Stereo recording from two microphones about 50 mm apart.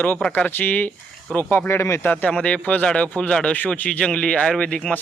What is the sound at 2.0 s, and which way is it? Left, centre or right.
Speech, left.